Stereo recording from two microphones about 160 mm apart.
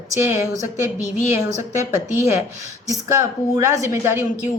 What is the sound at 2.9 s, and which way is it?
A woman's voice, 20° right (ahead or behind).